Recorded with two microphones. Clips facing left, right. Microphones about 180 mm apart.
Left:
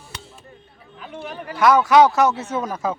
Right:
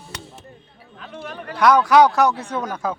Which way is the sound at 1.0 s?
10° left (ahead or behind).